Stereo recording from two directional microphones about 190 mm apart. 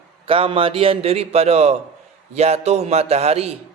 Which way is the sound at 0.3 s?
30° right (ahead or behind).